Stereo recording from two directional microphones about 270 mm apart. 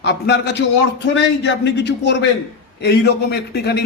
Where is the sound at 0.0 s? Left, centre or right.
Left.